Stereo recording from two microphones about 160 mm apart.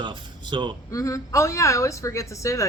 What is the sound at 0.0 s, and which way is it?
Speech, 30° right (ahead or behind).